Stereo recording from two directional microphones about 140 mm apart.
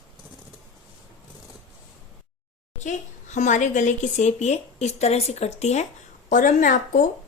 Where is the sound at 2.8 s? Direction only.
60° left (ahead or behind).